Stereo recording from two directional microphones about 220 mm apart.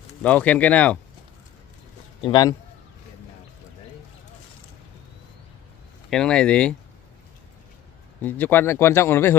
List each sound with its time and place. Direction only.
0.2 s speech: 5° left (ahead or behind)
2.2 s a man's voice: 20° left (ahead or behind)
6.0 s speech: 5° left (ahead or behind)
8.2 s speech: 10° left (ahead or behind)